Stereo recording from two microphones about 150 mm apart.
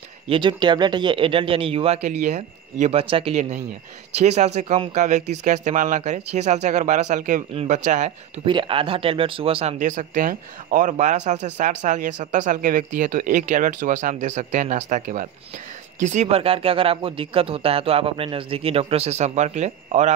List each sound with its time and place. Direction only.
0.3 s speech: 30° right (ahead or behind)
3.3 s speech: 50° right (ahead or behind)
8.5 s speech: 35° right (ahead or behind)
9.8 s speech: 60° right (ahead or behind)